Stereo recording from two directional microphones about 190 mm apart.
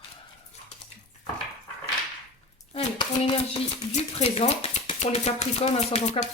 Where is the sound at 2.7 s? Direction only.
30° left (ahead or behind).